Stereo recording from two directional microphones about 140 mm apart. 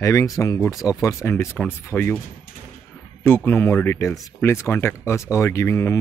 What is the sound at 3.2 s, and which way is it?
Speech, 15° left (ahead or behind).